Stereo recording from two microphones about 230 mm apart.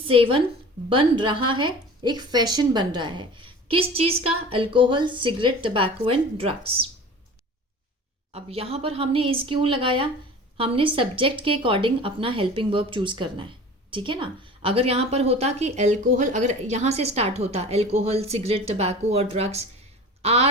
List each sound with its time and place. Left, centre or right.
0.1 s a woman's voice: right
8.3 s a woman's voice: right